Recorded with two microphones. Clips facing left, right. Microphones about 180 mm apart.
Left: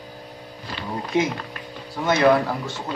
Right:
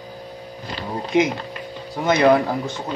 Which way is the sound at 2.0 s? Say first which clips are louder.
Right 2 dB; 20° right (ahead or behind).